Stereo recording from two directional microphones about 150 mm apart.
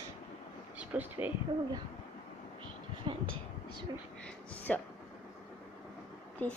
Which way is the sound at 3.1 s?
30° right (ahead or behind).